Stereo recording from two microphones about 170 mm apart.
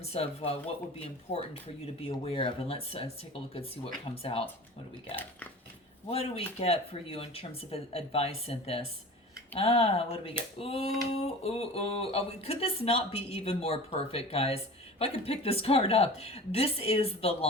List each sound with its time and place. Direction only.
0.0 s speech: 35° left (ahead or behind)
4.1 s speech: 35° left (ahead or behind)
6.1 s speech: 35° left (ahead or behind)